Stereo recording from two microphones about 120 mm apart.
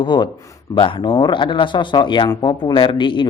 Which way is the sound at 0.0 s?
40° left (ahead or behind).